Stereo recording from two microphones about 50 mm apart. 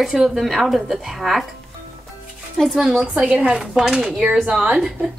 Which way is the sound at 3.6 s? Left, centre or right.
Centre.